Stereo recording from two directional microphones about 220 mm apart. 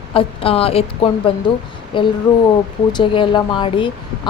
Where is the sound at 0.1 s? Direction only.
25° left (ahead or behind).